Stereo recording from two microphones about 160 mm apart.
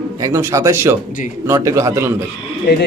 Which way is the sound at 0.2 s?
20° right (ahead or behind).